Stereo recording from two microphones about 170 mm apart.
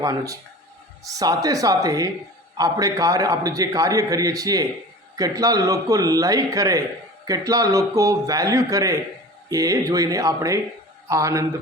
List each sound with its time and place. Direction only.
0.0 s a man's voice: 20° right (ahead or behind)